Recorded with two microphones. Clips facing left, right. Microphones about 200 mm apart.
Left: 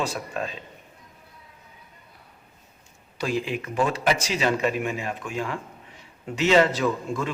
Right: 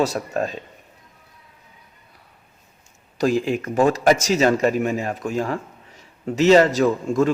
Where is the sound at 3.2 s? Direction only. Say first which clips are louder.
Right 7 dB; 45° right (ahead or behind).